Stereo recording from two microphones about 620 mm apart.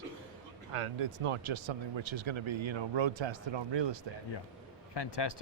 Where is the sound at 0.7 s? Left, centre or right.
Right.